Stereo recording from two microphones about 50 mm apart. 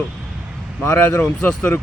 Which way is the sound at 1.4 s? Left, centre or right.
Left.